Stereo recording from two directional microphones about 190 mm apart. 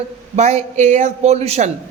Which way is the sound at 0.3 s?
35° right (ahead or behind).